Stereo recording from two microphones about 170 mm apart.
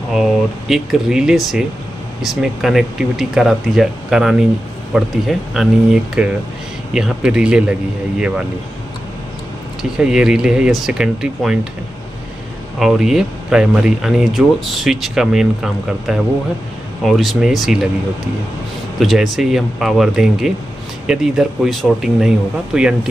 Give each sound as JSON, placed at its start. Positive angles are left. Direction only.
{"t": 0.1, "sound": "speech", "side_deg": 0}
{"t": 9.8, "sound": "speech", "side_deg": -5}
{"t": 12.7, "sound": "speech", "side_deg": 0}
{"t": 18.9, "sound": "speech", "side_deg": 0}